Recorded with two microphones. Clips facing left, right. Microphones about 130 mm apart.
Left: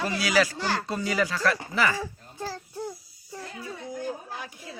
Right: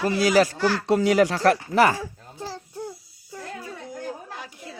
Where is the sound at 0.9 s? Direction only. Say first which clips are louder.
Right 9 dB; 70° right (ahead or behind); by 2.0 s 55° right (ahead or behind).